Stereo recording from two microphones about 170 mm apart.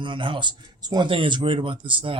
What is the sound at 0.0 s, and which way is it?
Speech, 30° right (ahead or behind).